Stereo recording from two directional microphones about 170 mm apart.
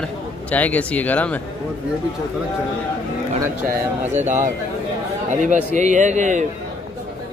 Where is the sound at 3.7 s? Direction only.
45° right (ahead or behind).